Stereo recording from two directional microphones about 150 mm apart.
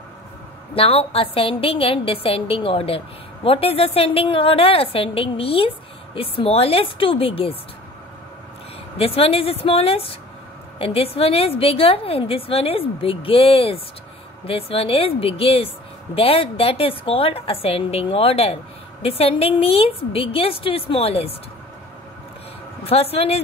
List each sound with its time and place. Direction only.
0.7 s a woman's voice: 40° left (ahead or behind)
8.9 s a woman's voice: 40° left (ahead or behind)
22.8 s a woman's voice: 40° left (ahead or behind)